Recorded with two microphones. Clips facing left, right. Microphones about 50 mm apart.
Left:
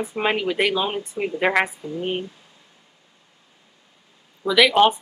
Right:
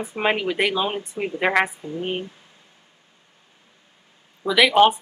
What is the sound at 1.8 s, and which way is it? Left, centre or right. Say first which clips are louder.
Speech: left 1 dB; right.